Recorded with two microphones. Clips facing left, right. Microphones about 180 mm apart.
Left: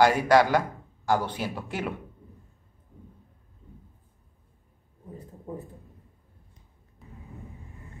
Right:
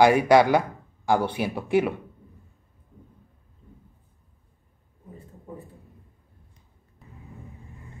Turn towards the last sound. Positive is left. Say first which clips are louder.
# left 1 dB
turn(degrees=0)  # may be behind; listen again after turning